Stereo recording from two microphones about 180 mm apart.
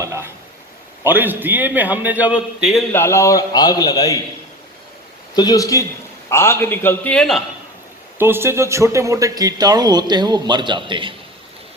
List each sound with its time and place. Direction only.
0.0 s a sound: 15° right (ahead or behind)
1.0 s a man's voice: 10° right (ahead or behind)
2.9 s a man's voice: 15° left (ahead or behind)
5.3 s a man's voice: 20° left (ahead or behind); by 7.4 s centre (ahead or behind)
8.2 s speech: 15° right (ahead or behind)